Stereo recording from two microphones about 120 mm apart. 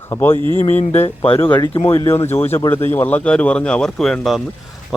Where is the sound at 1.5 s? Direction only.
40° left (ahead or behind).